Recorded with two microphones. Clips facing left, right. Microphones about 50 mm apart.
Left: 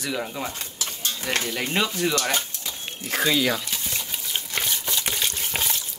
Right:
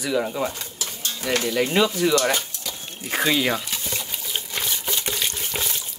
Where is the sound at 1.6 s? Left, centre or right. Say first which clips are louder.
Right 5 dB; centre.